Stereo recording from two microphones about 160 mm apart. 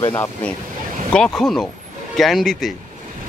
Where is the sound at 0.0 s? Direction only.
20° left (ahead or behind).